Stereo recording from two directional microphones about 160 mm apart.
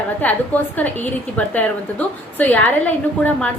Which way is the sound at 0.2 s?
10° left (ahead or behind).